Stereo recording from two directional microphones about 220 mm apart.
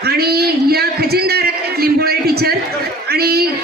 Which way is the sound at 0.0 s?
45° right (ahead or behind).